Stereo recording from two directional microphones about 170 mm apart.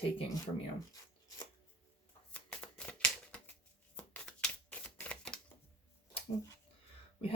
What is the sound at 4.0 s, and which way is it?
Typewriter, 5° left (ahead or behind).